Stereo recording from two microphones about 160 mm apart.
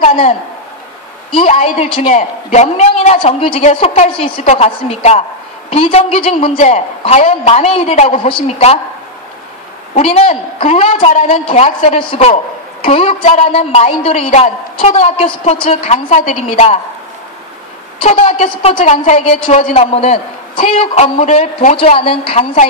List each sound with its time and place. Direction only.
0.0 s a woman's voice: 40° left (ahead or behind)
9.9 s a woman's voice: 40° left (ahead or behind)
18.0 s a woman's voice: 40° left (ahead or behind)